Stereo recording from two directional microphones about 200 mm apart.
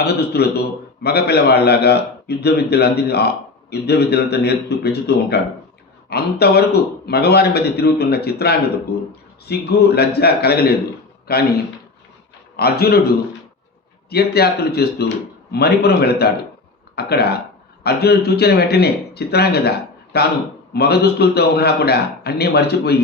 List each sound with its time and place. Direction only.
0.0 s a man's voice: 55° left (ahead or behind)
12.5 s a man's voice: 50° left (ahead or behind)
14.1 s a man's voice: 50° left (ahead or behind)